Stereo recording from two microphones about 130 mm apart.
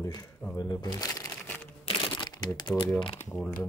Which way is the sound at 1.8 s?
40° left (ahead or behind).